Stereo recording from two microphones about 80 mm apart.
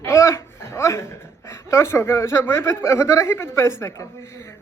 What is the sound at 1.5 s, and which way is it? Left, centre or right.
Speech, left.